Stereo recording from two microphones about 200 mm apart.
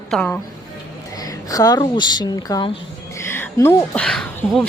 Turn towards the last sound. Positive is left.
turn(degrees=5)  # may be behind; listen again after turning